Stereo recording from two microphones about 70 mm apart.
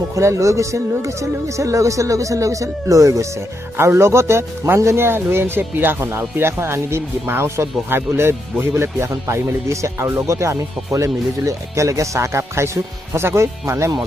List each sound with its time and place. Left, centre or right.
0.1 s speech: right
3.7 s speech: right